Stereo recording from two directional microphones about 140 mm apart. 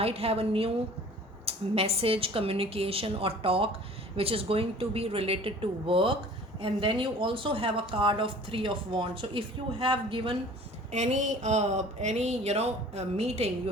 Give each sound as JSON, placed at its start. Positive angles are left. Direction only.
{"t": 0.0, "sound": "speech", "side_deg": -45}
{"t": 10.9, "sound": "speech", "side_deg": -55}